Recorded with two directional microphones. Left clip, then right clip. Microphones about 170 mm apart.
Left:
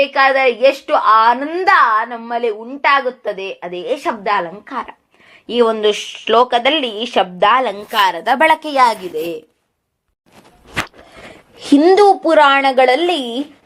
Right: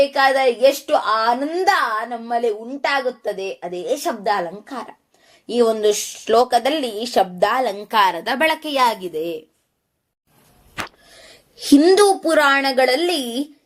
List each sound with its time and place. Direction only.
0.0 s a woman's voice: 10° left (ahead or behind)
8.2 s a woman's voice: 20° left (ahead or behind)
8.7 s a woman's voice: 10° left (ahead or behind)
11.5 s a woman's voice: centre (ahead or behind)